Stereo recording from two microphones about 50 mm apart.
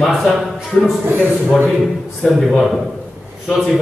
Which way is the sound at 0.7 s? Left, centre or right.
Left.